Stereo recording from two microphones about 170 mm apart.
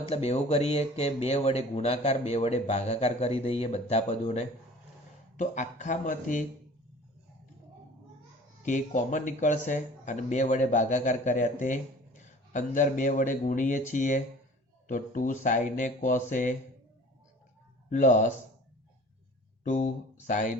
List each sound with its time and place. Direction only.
0.1 s speech: 40° left (ahead or behind)
8.6 s a man's voice: 45° left (ahead or behind)
17.8 s speech: 50° left (ahead or behind)
19.6 s speech: 50° left (ahead or behind)